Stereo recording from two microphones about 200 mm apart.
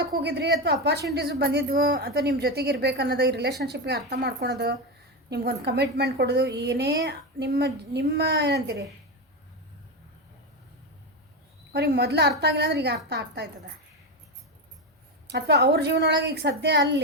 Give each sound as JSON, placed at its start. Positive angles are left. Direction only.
{"t": 0.0, "sound": "a woman's voice", "side_deg": -55}
{"t": 11.7, "sound": "a woman's voice", "side_deg": -55}
{"t": 15.3, "sound": "a woman's voice", "side_deg": -55}